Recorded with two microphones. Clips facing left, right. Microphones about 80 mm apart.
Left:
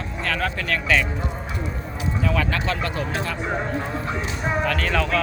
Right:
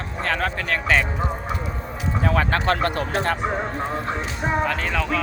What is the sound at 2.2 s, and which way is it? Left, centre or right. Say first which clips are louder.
Speech: right 3 dB; right.